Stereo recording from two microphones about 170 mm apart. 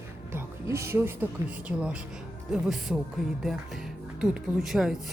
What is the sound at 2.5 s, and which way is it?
Speech, 5° right (ahead or behind).